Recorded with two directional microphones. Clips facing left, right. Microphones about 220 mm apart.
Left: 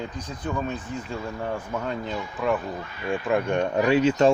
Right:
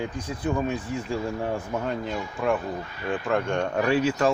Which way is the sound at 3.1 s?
10° left (ahead or behind).